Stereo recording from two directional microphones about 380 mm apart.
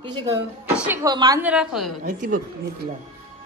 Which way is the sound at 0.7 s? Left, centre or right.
Centre.